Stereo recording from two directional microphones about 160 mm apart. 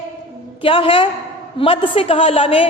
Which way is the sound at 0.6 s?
35° left (ahead or behind).